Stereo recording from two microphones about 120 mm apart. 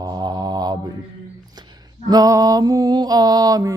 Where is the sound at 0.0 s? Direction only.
35° right (ahead or behind).